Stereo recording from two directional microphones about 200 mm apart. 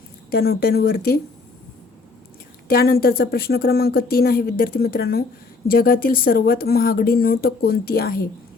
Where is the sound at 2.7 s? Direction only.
50° left (ahead or behind).